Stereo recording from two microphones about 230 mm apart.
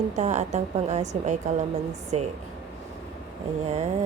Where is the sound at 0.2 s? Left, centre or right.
Right.